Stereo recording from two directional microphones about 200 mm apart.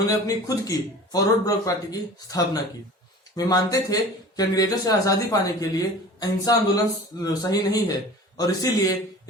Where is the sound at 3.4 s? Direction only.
20° left (ahead or behind).